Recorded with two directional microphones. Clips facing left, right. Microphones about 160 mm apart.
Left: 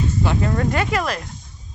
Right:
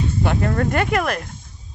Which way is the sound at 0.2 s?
55° right (ahead or behind).